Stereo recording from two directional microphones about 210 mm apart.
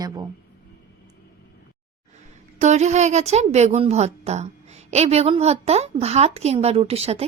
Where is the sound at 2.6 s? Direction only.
35° right (ahead or behind).